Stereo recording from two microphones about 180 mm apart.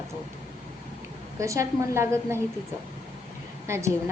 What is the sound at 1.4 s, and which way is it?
A woman's voice, 15° right (ahead or behind).